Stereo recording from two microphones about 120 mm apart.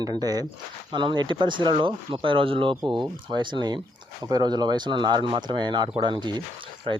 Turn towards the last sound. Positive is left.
turn(degrees=-40)  # may be behind; listen again after turning